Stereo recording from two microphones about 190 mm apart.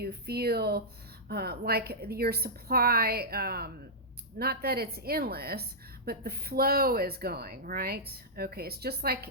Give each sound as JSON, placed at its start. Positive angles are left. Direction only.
{"t": 0.0, "sound": "a woman's voice", "side_deg": -55}